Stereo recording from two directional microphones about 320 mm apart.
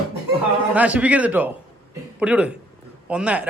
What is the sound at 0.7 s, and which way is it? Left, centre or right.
A man's voice, centre.